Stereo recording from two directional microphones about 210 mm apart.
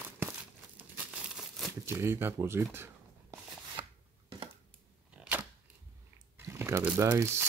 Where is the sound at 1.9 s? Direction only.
10° right (ahead or behind).